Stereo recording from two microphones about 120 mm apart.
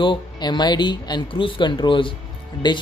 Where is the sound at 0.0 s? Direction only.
40° left (ahead or behind).